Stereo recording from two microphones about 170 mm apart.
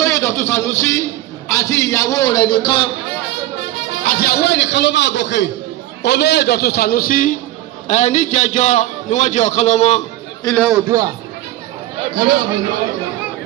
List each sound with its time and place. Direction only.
0.0 s a man's voice: 15° left (ahead or behind)
4.0 s a man's voice: 60° left (ahead or behind); by 5.5 s 90° left
6.0 s a man's voice: 80° left; by 7.3 s 55° left (ahead or behind)
7.9 s a man's voice: 45° left (ahead or behind)
10.8 s a man's voice: 20° right (ahead or behind)
12.1 s a man's voice: 60° right (ahead or behind)